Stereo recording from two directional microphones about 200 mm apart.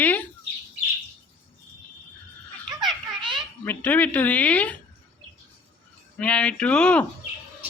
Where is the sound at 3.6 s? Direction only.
10° left (ahead or behind).